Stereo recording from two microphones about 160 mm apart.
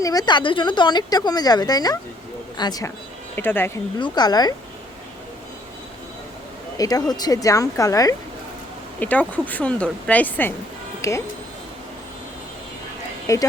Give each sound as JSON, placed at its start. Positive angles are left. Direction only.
{"t": 0.0, "sound": "speech", "side_deg": 25}
{"t": 3.3, "sound": "speech", "side_deg": 15}
{"t": 3.9, "sound": "speech", "side_deg": 25}
{"t": 6.7, "sound": "speech", "side_deg": 20}
{"t": 9.0, "sound": "speech", "side_deg": 10}
{"t": 13.3, "sound": "speech", "side_deg": 20}